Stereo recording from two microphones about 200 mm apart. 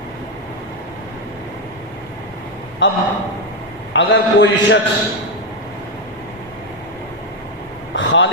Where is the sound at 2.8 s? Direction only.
70° left (ahead or behind).